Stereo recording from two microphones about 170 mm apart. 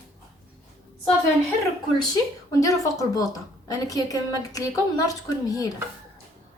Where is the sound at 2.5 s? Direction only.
20° left (ahead or behind).